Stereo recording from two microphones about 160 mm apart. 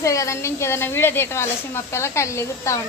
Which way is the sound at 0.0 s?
20° left (ahead or behind).